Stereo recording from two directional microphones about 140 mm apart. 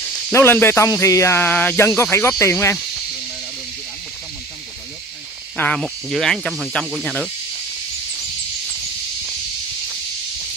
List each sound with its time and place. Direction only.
0.3 s speech: 15° left (ahead or behind)
5.8 s speech: centre (ahead or behind)